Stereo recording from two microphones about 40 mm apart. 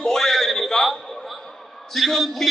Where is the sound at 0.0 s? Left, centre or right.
Centre.